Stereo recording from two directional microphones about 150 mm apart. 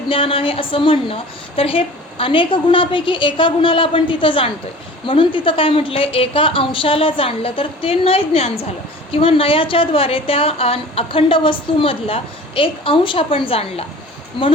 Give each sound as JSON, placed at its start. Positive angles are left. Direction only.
{"t": 0.1, "sound": "a woman's voice", "side_deg": 35}